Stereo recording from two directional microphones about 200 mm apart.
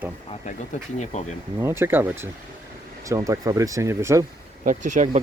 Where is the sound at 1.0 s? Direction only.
35° left (ahead or behind).